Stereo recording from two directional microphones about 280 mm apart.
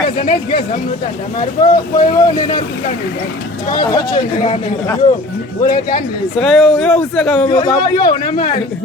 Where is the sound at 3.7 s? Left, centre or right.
Centre.